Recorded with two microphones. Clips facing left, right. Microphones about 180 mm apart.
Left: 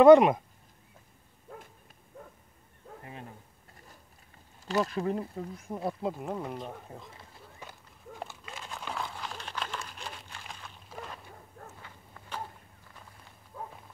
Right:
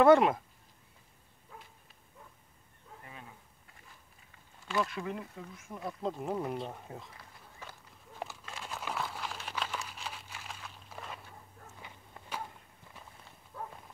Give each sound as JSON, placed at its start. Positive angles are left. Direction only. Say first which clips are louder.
{"t": 0.0, "sound": "speech", "louder": "left 6 dB", "side_deg": 20}
{"t": 3.1, "sound": "a sound", "louder": "left 6 dB", "side_deg": 40}
{"t": 4.6, "sound": "speech", "louder": "left 5 dB", "side_deg": 40}
{"t": 6.0, "sound": "speech", "louder": "left 1 dB", "side_deg": 5}
{"t": 6.3, "sound": "speech", "louder": "right 1 dB", "side_deg": -5}
{"t": 8.2, "sound": "crumpling", "louder": "right 1 dB", "side_deg": 0}
{"t": 11.8, "sound": "walk", "louder": "even", "side_deg": -15}
{"t": 13.5, "sound": "horse", "louder": "left 1 dB", "side_deg": 15}